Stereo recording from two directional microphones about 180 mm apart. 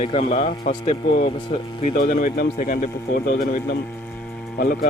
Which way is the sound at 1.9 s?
50° left (ahead or behind).